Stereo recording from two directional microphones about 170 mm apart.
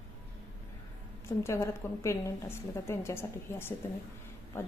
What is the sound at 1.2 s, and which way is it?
A woman's voice, 15° left (ahead or behind).